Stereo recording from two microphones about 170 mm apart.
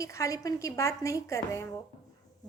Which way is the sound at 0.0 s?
20° left (ahead or behind).